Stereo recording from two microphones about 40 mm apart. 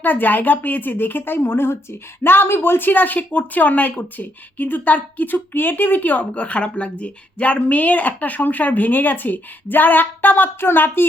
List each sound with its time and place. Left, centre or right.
0.0 s a woman's voice: left
2.6 s speech: left